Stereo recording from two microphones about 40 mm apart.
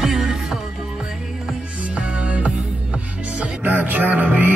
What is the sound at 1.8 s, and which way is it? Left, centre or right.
Music, right.